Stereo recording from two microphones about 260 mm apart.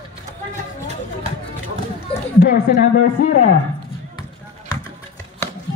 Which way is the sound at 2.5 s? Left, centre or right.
Left.